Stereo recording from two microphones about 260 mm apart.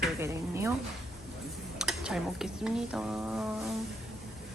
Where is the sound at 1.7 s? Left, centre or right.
Centre.